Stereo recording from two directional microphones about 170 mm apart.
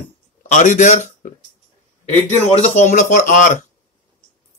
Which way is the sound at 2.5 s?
40° left (ahead or behind).